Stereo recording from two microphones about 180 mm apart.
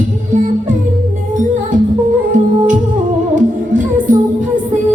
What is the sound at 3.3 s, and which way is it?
Music, 50° right (ahead or behind).